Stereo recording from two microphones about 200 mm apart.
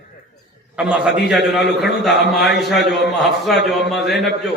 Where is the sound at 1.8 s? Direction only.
60° left (ahead or behind).